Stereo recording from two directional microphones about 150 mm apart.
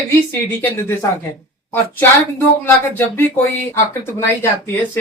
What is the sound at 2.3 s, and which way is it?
Speech, 15° left (ahead or behind).